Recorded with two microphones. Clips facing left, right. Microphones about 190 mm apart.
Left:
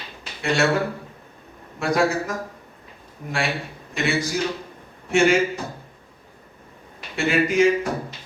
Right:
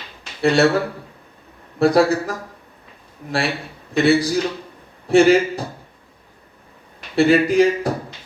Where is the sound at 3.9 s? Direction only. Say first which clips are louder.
Right 8 dB; 35° right (ahead or behind).